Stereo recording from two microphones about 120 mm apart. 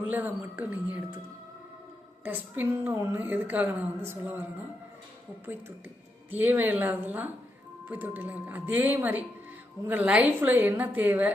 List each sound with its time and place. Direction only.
0.0 s a woman's voice: 15° right (ahead or behind)
2.2 s a woman's voice: 15° right (ahead or behind)
6.3 s a woman's voice: 15° right (ahead or behind)